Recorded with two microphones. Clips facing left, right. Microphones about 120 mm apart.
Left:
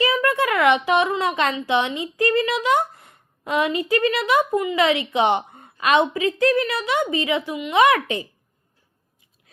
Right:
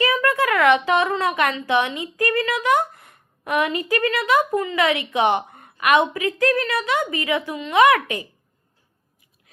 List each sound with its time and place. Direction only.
0.0 s a woman's voice: 20° left (ahead or behind)